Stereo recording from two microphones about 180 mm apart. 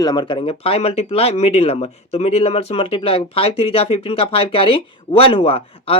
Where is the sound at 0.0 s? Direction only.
25° left (ahead or behind).